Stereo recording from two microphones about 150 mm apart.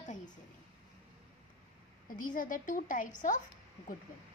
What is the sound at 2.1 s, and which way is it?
A woman's voice, 65° left (ahead or behind).